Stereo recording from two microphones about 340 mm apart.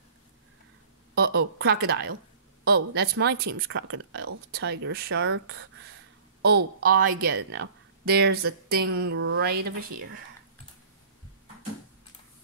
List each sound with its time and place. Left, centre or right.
1.1 s a woman's voice: right